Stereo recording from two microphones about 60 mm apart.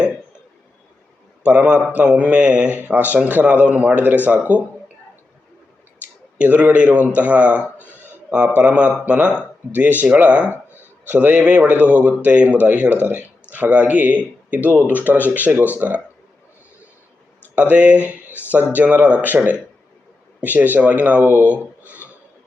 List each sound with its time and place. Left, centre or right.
1.5 s speech: right
2.6 s speech: right
6.4 s speech: right
7.9 s a sound: right
8.5 s speech: right
17.5 s speech: right
20.4 s speech: right